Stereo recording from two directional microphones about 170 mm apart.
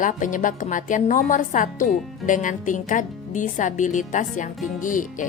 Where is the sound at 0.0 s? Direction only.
50° left (ahead or behind).